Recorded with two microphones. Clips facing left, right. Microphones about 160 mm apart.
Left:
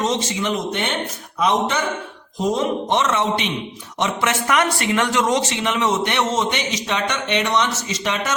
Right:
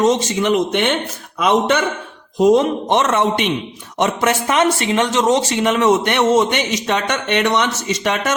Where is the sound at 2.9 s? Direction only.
55° right (ahead or behind).